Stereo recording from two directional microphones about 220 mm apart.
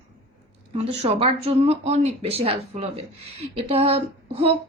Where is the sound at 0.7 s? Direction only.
30° right (ahead or behind).